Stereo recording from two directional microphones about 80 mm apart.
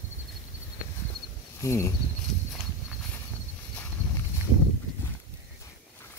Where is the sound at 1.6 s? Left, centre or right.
Left.